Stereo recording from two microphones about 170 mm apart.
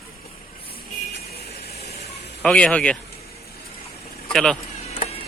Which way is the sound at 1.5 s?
70° left (ahead or behind).